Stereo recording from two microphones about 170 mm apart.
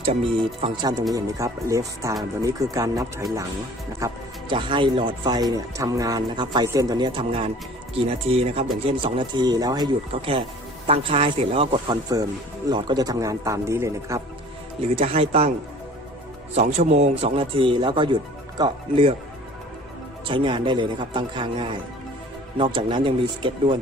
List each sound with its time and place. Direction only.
0.6 s speech: 25° right (ahead or behind)
4.0 s speech: 30° right (ahead or behind)
14.8 s speech: 35° right (ahead or behind)
16.6 s speech: 40° right (ahead or behind)
20.2 s speech: 30° right (ahead or behind)